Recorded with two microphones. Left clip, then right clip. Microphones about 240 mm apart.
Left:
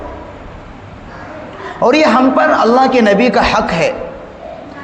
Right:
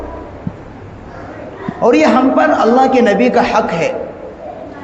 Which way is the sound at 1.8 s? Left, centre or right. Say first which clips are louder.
Left 1 dB; left.